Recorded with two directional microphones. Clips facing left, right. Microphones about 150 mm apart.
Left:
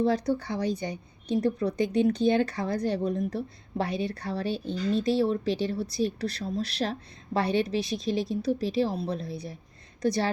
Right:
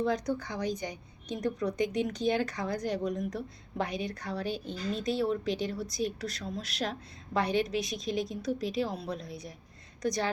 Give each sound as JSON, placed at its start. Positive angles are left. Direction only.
{"t": 0.0, "sound": "a woman's voice", "side_deg": 30}